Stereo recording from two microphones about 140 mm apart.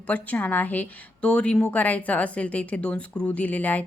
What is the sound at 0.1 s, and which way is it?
A woman's voice, 10° left (ahead or behind).